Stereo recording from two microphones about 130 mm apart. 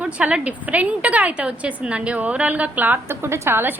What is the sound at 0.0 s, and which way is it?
A woman's voice, 10° right (ahead or behind).